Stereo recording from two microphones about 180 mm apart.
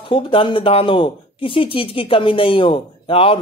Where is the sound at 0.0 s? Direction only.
30° left (ahead or behind).